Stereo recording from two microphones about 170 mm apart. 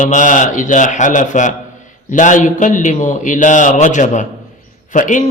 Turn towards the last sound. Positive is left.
turn(degrees=45)  # may be behind; listen again after turning